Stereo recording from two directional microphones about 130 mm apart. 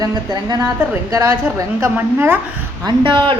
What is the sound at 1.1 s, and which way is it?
A woman's voice, 25° right (ahead or behind).